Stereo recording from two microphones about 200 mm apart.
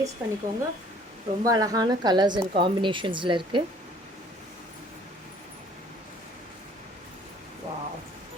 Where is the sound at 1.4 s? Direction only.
15° right (ahead or behind).